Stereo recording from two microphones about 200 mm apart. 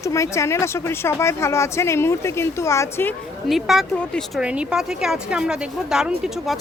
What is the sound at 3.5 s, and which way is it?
A woman's voice, centre (ahead or behind).